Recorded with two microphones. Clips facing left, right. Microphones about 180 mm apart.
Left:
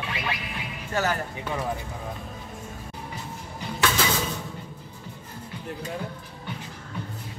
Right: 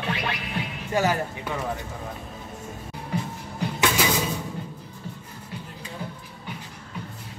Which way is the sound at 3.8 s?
15° right (ahead or behind).